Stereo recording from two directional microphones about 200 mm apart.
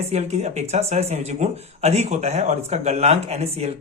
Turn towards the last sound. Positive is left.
turn(degrees=-30)  # may be behind; listen again after turning